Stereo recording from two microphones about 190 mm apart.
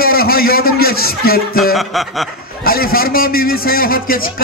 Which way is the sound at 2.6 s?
50° left (ahead or behind).